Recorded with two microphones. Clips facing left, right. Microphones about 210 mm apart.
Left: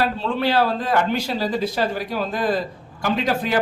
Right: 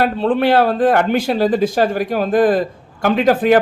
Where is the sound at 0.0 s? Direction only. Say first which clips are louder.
Right 6 dB; 55° right (ahead or behind).